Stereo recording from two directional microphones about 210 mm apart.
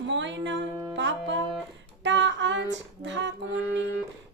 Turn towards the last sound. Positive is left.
turn(degrees=-60)  # may be behind; listen again after turning